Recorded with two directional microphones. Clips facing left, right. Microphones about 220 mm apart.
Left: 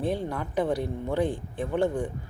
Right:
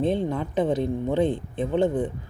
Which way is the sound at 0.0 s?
20° right (ahead or behind).